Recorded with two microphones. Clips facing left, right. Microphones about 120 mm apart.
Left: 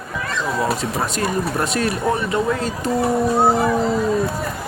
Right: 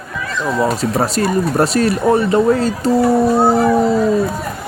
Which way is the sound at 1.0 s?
35° right (ahead or behind).